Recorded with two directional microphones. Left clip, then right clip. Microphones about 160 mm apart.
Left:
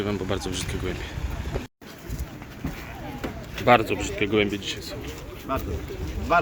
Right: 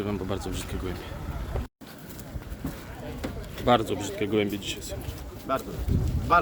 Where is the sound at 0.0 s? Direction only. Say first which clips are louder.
Left 4 dB; 5° right (ahead or behind).